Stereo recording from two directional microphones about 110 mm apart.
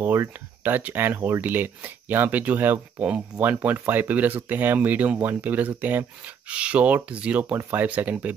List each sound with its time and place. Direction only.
0.0 s speech: 20° right (ahead or behind)